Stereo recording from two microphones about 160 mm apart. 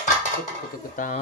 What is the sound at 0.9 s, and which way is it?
Speech, 55° left (ahead or behind).